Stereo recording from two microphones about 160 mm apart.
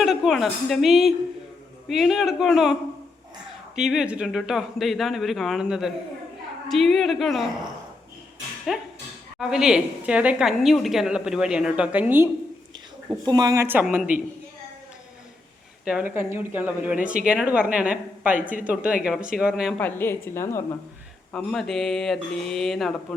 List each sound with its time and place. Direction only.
0.0 s a woman's voice: centre (ahead or behind)
3.8 s a woman's voice: 5° right (ahead or behind)
8.7 s a woman's voice: 5° right (ahead or behind)
13.2 s speech: 25° right (ahead or behind)
13.8 s a woman's voice: 5° right (ahead or behind)
15.8 s a woman's voice: 5° right (ahead or behind)
19.8 s a woman's voice: 15° left (ahead or behind)
21.3 s a woman's voice: centre (ahead or behind)